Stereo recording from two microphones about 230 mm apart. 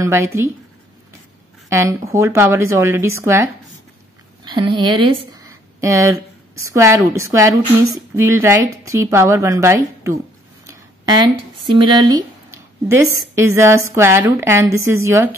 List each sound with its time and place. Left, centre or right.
0.0 s a woman's voice: centre
1.7 s a woman's voice: centre
4.5 s speech: centre
10.7 s a sound: centre
11.6 s a woman's voice: centre